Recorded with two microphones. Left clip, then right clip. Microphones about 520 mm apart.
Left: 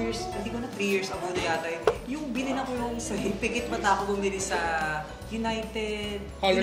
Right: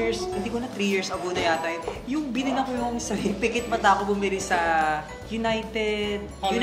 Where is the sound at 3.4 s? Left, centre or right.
Right.